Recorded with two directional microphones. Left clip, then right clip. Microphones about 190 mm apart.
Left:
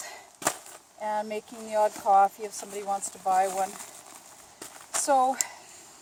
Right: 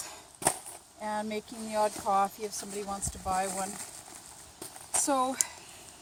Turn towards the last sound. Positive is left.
turn(degrees=30)  # may be behind; listen again after turning